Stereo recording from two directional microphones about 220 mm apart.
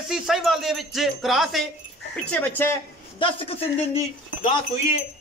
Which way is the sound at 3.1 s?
25° left (ahead or behind).